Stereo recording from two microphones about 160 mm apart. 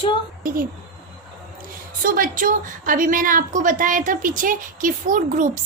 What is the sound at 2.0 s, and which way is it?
A woman's voice, 60° right (ahead or behind).